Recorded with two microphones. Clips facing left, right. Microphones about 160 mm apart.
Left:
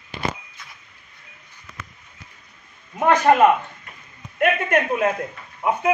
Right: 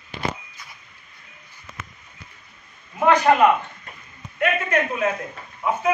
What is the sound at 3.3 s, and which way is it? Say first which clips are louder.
Speech: left 3 dB; 40° left (ahead or behind).